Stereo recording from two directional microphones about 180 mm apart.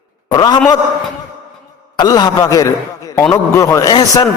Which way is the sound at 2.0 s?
20° left (ahead or behind).